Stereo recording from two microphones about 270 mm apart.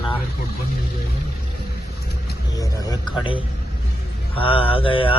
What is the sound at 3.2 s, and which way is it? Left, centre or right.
Mantra, centre.